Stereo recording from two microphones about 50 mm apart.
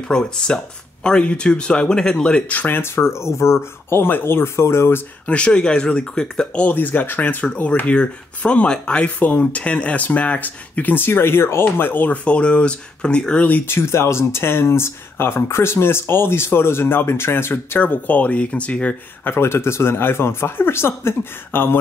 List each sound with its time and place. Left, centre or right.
0.1 s speech: centre
2.5 s speech: left
2.8 s speech: left
5.2 s speech: left
6.7 s speech: left
11.8 s speech: left
12.3 s speech: left
13.7 s speech: left
17.8 s speech: left
19.2 s speech: left